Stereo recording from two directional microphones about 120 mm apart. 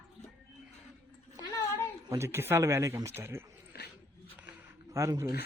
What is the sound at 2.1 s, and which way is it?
Speech, 20° right (ahead or behind).